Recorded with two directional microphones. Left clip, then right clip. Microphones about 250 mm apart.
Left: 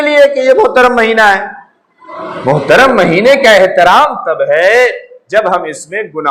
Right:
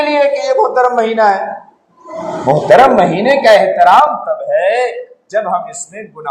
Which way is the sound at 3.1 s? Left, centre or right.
Left.